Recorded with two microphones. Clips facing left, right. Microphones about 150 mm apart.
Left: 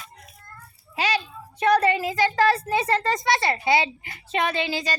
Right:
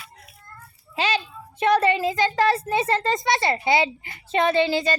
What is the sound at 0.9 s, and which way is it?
A child's voice, 30° right (ahead or behind).